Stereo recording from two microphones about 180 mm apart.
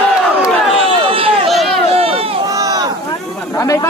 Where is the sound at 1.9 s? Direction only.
30° right (ahead or behind).